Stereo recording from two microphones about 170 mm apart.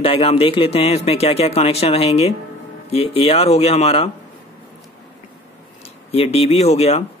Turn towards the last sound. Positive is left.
turn(degrees=40)  # may be behind; listen again after turning